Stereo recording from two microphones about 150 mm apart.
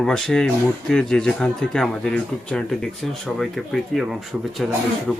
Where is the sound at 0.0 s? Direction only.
5° left (ahead or behind).